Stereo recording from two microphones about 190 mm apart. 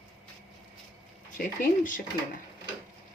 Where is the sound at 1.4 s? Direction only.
50° left (ahead or behind).